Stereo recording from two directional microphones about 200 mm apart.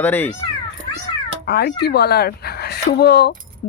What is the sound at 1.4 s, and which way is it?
Speech, 50° left (ahead or behind).